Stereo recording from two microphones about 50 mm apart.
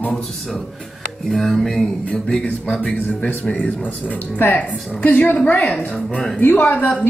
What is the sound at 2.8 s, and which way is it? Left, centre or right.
A woman's voice, left.